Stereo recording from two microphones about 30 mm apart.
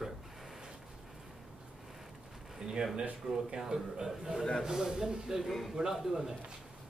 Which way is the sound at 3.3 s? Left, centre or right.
Centre.